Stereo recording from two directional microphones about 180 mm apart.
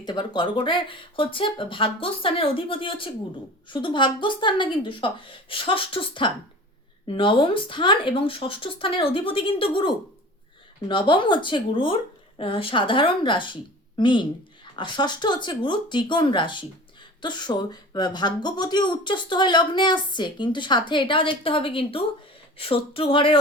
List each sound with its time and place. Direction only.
0.0 s speech: 25° left (ahead or behind)